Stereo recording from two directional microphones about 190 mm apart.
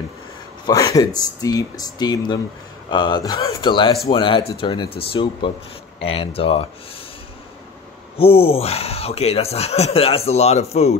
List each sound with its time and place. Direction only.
0.7 s speech: 15° left (ahead or behind)
8.2 s speech: 30° left (ahead or behind)